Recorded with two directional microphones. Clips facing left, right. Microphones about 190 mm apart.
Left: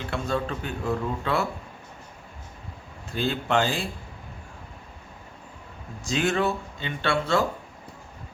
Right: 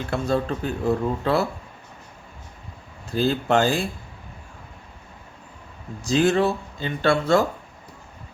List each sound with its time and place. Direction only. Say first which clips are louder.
0.1 s speech: right 5 dB; 40° right (ahead or behind)
3.1 s speech: right 5 dB; 35° right (ahead or behind)
6.0 s speech: right 5 dB; 35° right (ahead or behind)